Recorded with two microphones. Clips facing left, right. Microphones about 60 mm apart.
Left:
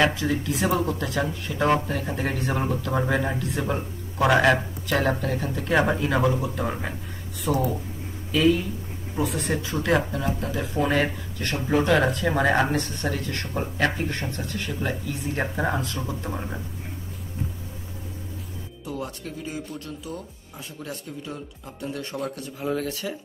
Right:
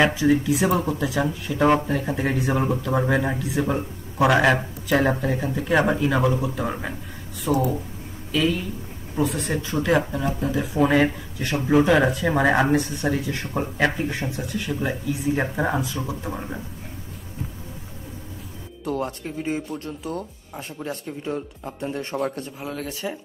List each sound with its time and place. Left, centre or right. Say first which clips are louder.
0.0 s speech: right 4 dB; centre
18.9 s speech: right 6 dB; right
19.2 s speech: right 6 dB; right
20.1 s speech: right 5 dB; right
20.8 s speech: right 5 dB; right
22.8 s speech: right 1 dB; right